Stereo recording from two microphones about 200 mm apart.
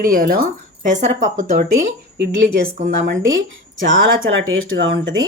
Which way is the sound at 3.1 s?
70° right (ahead or behind).